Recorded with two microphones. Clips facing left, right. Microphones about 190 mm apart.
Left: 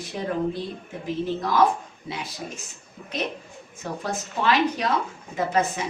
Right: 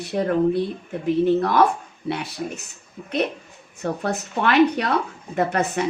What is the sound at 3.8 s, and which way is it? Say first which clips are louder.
Speech: right 5 dB; 60° right (ahead or behind).